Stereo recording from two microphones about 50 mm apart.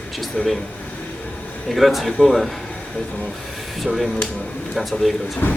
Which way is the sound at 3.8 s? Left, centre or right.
Centre.